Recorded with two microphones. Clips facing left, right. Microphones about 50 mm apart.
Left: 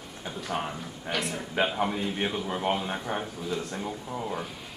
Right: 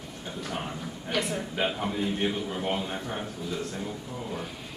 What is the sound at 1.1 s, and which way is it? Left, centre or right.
Speech, centre.